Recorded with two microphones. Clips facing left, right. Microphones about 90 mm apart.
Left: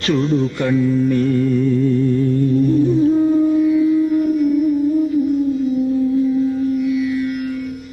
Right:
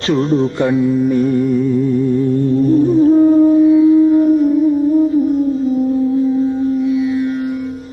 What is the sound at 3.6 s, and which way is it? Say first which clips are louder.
Music: right 6 dB; 30° right (ahead or behind).